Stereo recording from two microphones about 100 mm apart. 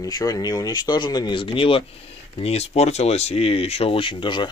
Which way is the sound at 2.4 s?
90° left.